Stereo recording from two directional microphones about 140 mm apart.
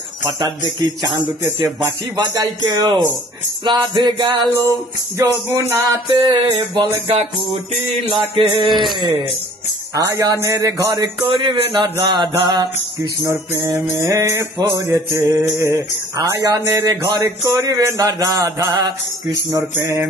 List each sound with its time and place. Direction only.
0.4 s music: 35° right (ahead or behind)
5.1 s music: 20° right (ahead or behind)
6.1 s music: 35° right (ahead or behind)
9.9 s music: 25° right (ahead or behind)
11.2 s music: 35° right (ahead or behind)
13.3 s music: 20° right (ahead or behind)
19.7 s music: 15° right (ahead or behind)